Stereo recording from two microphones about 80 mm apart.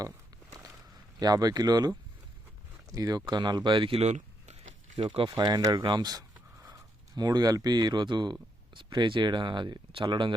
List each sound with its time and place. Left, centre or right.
1.2 s speech: right
2.9 s speech: right
4.9 s speech: right
5.4 s speech: right
5.7 s a sound: right
7.2 s speech: right